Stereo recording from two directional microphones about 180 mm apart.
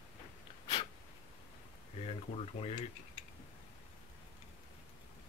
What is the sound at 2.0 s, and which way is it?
Speech, 35° left (ahead or behind).